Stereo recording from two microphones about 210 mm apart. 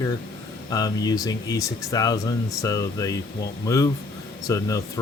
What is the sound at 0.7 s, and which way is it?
Speech, 15° left (ahead or behind).